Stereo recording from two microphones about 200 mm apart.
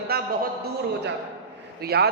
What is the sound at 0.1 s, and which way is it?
Speech, 50° right (ahead or behind).